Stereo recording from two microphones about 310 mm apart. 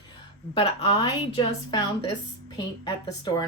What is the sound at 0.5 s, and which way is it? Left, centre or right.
A woman's voice, centre.